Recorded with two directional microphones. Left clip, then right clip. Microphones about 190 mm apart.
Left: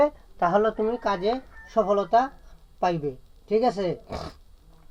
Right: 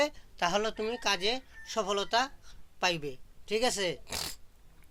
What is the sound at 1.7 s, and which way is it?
Speech, 30° right (ahead or behind).